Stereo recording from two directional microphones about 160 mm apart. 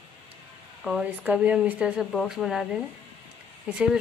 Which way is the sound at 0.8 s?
5° right (ahead or behind).